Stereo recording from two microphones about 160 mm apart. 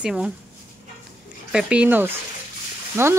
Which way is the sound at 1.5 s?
5° right (ahead or behind).